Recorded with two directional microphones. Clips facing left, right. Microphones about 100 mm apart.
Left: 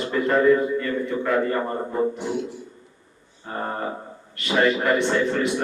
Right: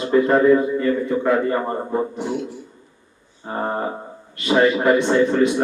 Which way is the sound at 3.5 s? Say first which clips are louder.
Right 4 dB; 20° right (ahead or behind).